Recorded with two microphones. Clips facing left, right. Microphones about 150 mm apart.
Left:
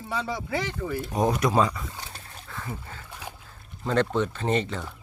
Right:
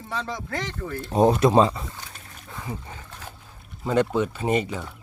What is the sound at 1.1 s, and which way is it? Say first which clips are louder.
Speech: right 7 dB; 25° right (ahead or behind).